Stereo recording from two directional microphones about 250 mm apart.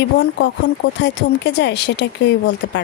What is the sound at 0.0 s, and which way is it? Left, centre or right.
A woman's voice, left.